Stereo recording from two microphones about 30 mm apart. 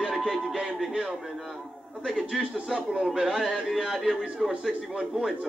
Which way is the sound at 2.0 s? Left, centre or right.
Centre.